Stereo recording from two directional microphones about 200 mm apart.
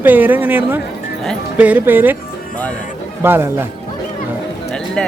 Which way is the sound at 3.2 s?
10° right (ahead or behind).